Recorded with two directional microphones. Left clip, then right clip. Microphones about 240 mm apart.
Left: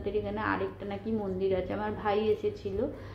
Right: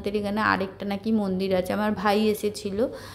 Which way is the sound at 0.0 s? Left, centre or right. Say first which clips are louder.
Right 7 dB; right.